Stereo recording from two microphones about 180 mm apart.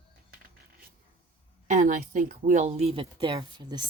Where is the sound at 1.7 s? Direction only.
45° right (ahead or behind).